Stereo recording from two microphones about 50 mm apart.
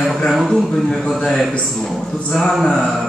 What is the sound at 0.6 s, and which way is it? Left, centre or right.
A man's voice, centre.